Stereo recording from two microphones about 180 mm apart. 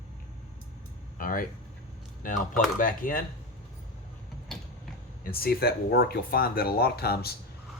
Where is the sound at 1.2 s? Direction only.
50° left (ahead or behind).